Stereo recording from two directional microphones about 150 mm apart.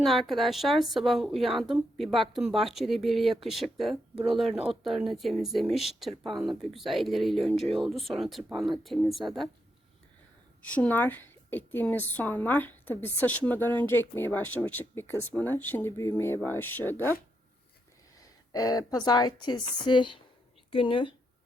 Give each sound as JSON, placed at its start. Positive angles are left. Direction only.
{"t": 0.0, "sound": "speech", "side_deg": 0}
{"t": 10.7, "sound": "a woman's voice", "side_deg": 10}
{"t": 18.5, "sound": "a woman's voice", "side_deg": 25}